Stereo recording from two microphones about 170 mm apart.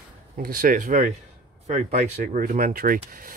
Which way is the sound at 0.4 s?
55° right (ahead or behind).